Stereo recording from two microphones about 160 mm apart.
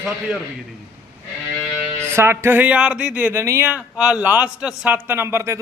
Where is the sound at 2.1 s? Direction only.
15° right (ahead or behind).